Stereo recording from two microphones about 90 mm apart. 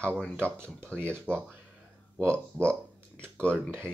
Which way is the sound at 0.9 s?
25° right (ahead or behind).